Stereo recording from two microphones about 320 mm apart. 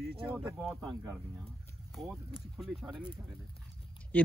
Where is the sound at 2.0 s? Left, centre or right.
Centre.